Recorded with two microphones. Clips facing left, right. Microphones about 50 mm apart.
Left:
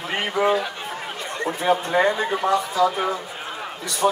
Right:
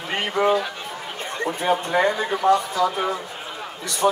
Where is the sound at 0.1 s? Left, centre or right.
Centre.